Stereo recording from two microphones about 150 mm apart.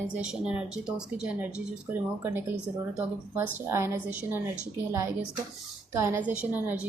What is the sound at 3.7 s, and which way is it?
Speech, 15° right (ahead or behind).